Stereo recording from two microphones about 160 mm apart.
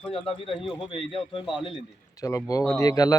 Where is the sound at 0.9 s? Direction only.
35° left (ahead or behind).